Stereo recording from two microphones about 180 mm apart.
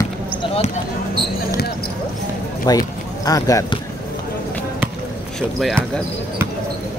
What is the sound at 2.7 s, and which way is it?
Speech, 20° left (ahead or behind).